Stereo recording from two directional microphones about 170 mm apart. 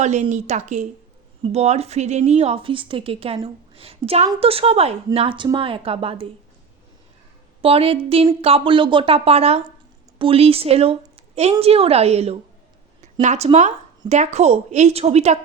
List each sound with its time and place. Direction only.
0.0 s a woman's voice: 45° right (ahead or behind)
7.6 s a woman's voice: 35° right (ahead or behind)